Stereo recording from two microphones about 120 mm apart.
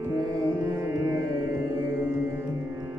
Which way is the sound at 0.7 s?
15° right (ahead or behind).